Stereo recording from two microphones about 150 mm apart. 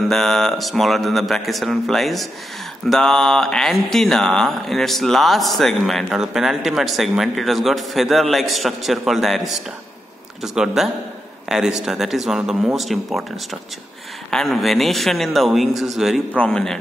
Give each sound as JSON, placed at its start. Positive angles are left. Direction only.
{"t": 0.1, "sound": "speech", "side_deg": 0}